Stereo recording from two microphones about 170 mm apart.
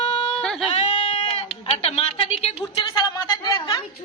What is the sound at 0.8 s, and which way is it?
Bleat, 35° left (ahead or behind).